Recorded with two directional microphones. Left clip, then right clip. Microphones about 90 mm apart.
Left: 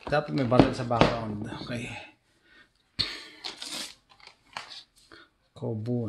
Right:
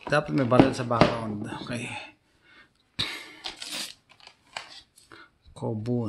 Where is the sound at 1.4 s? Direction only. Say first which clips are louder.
Right 2 dB; 35° right (ahead or behind).